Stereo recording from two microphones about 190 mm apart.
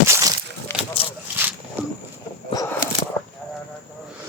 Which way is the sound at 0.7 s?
10° left (ahead or behind).